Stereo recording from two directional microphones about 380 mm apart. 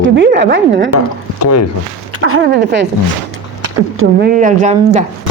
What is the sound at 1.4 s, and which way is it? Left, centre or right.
Speech, left.